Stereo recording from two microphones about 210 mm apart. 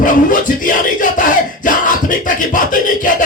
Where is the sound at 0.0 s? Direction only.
40° left (ahead or behind).